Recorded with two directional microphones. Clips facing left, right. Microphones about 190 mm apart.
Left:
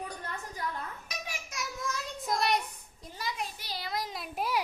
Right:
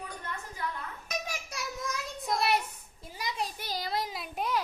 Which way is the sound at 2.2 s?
Centre (ahead or behind).